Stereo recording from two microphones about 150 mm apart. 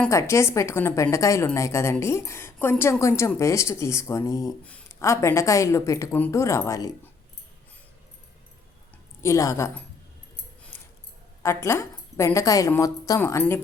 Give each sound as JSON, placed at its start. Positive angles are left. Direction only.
{"t": 0.1, "sound": "a woman's voice", "side_deg": 20}
{"t": 4.6, "sound": "a sound", "side_deg": 10}
{"t": 5.0, "sound": "a woman's voice", "side_deg": 20}
{"t": 9.2, "sound": "a woman's voice", "side_deg": 20}
{"t": 10.7, "sound": "a sound", "side_deg": 15}
{"t": 11.4, "sound": "a woman's voice", "side_deg": 20}